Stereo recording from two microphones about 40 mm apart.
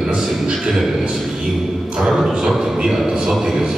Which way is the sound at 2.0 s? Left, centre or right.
Centre.